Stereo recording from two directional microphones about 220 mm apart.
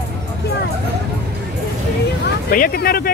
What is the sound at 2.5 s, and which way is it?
Speech, 40° left (ahead or behind).